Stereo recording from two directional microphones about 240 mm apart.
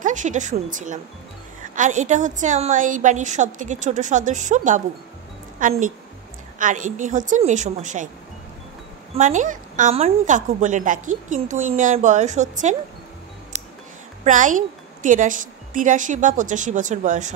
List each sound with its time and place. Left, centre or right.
0.0 s a woman's voice: right
9.1 s a woman's voice: right
14.2 s a woman's voice: right